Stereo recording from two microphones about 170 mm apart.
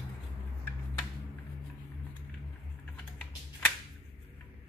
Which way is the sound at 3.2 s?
5° left (ahead or behind).